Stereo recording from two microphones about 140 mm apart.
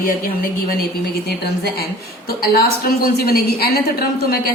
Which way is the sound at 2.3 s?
90° left.